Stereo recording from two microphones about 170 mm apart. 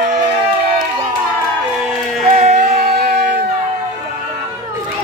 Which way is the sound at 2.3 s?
45° right (ahead or behind).